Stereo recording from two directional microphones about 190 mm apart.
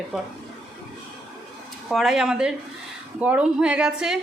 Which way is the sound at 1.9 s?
Centre (ahead or behind).